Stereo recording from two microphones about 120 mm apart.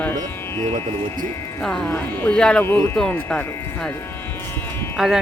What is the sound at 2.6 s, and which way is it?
Speech, 20° left (ahead or behind).